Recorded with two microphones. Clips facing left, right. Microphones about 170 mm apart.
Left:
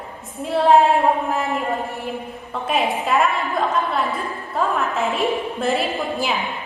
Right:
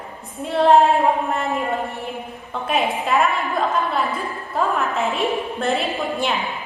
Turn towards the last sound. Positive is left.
turn(degrees=0)  # may be behind; listen again after turning